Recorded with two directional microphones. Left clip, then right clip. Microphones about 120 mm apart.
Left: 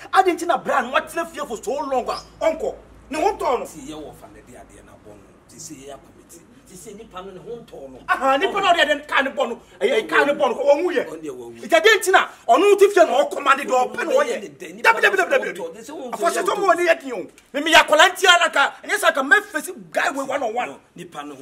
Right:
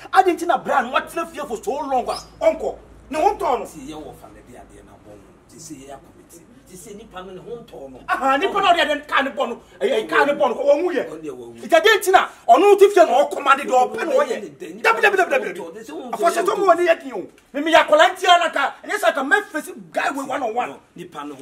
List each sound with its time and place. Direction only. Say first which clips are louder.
0.0 s a man's voice: right 1 dB; centre (ahead or behind)
8.1 s a man's voice: even; centre (ahead or behind)
17.5 s a woman's voice: even; 20° left (ahead or behind); by 21.4 s centre (ahead or behind)